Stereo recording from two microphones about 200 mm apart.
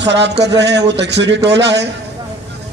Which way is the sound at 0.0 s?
60° right (ahead or behind).